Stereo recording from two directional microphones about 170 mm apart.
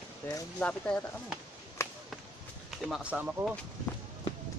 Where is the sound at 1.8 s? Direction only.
15° left (ahead or behind).